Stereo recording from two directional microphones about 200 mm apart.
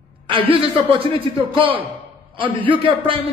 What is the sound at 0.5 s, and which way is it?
A man's voice, 25° right (ahead or behind).